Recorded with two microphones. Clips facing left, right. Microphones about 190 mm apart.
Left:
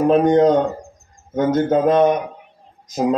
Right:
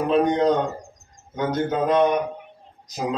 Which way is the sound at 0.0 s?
50° left (ahead or behind).